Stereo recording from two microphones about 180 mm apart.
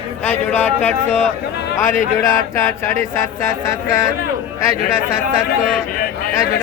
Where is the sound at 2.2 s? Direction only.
20° left (ahead or behind).